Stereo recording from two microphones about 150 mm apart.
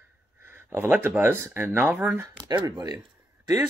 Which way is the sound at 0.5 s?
15° right (ahead or behind).